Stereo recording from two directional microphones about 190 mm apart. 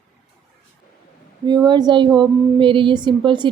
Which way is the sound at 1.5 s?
20° right (ahead or behind).